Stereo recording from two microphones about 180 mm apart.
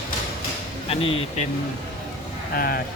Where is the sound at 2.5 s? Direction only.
55° left (ahead or behind).